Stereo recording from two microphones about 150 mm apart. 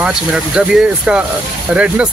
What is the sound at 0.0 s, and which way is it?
Speech, 5° right (ahead or behind).